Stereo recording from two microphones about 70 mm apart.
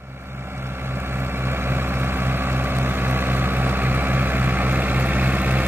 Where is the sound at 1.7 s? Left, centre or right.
Right.